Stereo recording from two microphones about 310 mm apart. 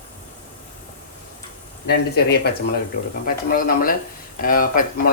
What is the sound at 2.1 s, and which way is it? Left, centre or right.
Speech, left.